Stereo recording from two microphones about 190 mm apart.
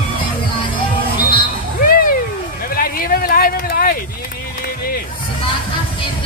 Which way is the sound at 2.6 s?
50° left (ahead or behind).